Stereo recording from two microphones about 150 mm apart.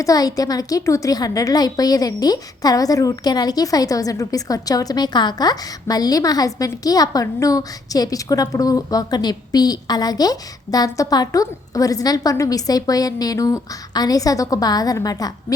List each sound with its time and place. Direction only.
0.0 s a woman's voice: 25° left (ahead or behind)